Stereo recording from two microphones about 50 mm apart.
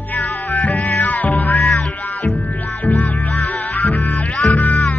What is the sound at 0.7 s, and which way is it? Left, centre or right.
Music, left.